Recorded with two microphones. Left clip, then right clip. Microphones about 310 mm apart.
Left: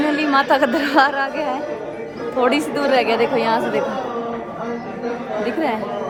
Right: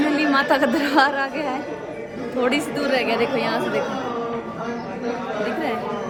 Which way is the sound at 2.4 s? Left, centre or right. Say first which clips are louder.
Left 4 dB; centre.